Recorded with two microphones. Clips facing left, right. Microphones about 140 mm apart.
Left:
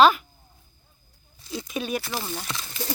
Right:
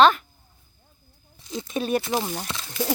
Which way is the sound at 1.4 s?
20° right (ahead or behind).